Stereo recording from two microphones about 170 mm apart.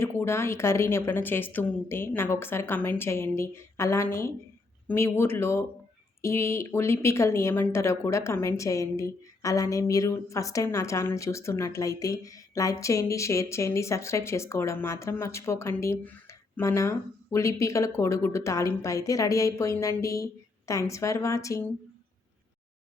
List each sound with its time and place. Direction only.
0.0 s speech: 15° left (ahead or behind)